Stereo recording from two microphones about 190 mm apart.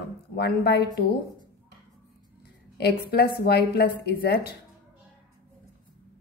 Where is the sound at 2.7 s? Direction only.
55° left (ahead or behind).